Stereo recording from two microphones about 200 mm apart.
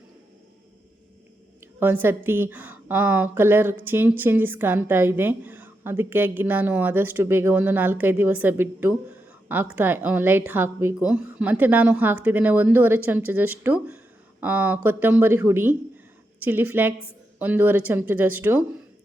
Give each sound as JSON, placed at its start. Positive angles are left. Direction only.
{"t": 1.6, "sound": "a woman's voice", "side_deg": -10}